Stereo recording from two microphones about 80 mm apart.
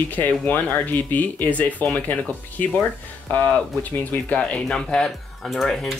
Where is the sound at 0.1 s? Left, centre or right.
Centre.